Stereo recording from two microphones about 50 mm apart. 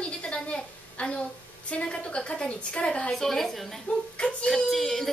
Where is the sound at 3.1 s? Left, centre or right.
Centre.